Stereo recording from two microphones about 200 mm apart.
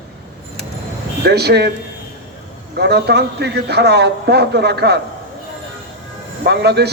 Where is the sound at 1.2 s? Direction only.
55° right (ahead or behind).